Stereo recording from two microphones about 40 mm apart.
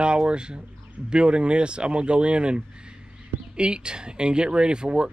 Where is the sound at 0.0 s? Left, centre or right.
Right.